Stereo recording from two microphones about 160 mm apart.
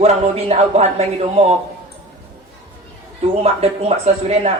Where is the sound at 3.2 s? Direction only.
40° right (ahead or behind).